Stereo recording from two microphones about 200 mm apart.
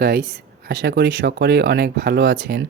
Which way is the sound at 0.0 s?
55° right (ahead or behind).